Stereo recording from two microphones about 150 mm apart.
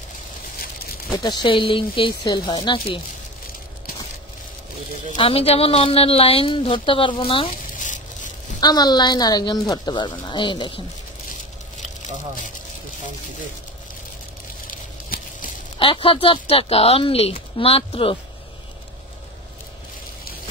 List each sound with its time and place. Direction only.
1.1 s a woman's voice: 30° left (ahead or behind)
5.1 s a woman's voice: 40° left (ahead or behind)
7.8 s a sound: 55° left (ahead or behind)
8.5 s speech: 25° left (ahead or behind)
15.8 s a woman's voice: 35° left (ahead or behind)